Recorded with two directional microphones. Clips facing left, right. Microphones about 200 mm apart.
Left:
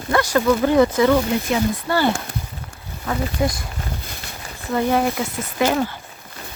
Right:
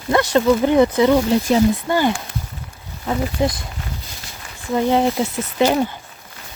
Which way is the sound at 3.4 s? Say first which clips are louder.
Right 2 dB; 20° right (ahead or behind).